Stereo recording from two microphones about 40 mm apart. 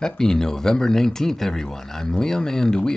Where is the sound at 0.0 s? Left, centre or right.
Centre.